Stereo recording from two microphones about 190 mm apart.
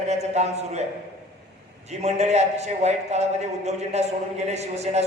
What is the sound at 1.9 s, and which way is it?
A man's voice, 35° right (ahead or behind).